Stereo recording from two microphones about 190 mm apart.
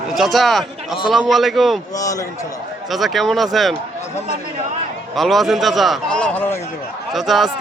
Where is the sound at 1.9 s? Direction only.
15° left (ahead or behind).